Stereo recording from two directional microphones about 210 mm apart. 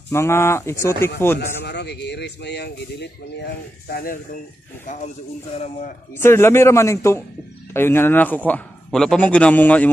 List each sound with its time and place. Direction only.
0.1 s a man's voice: 10° left (ahead or behind)
1.4 s a man's voice: 55° left (ahead or behind)
5.6 s speech: 35° left (ahead or behind)
6.1 s a man's voice: 10° left (ahead or behind)